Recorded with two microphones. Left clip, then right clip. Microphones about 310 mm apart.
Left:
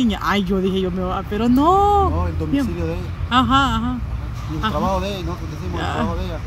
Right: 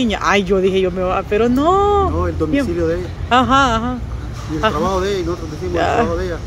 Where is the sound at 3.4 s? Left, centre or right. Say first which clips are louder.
Right 3 dB; centre.